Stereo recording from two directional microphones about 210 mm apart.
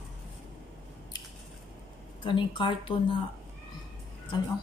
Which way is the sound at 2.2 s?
25° left (ahead or behind).